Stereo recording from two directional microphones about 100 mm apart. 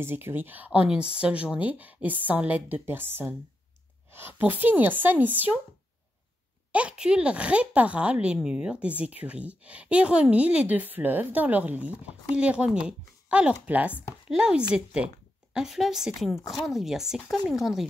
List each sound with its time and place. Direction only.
0.0 s speech: 20° right (ahead or behind)
6.7 s speech: 10° right (ahead or behind)